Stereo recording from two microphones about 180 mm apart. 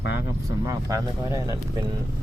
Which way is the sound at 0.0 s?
75° left (ahead or behind).